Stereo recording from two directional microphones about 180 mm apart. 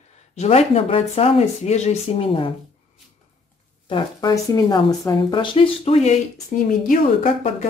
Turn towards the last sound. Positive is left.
turn(degrees=45)  # may be behind; listen again after turning